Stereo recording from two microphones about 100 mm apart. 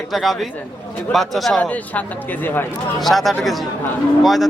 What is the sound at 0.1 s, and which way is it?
Speech, centre (ahead or behind).